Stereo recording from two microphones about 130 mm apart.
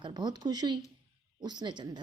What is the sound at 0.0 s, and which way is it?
A woman's voice, 35° right (ahead or behind).